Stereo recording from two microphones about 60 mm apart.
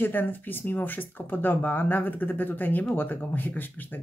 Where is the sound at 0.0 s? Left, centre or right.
Left.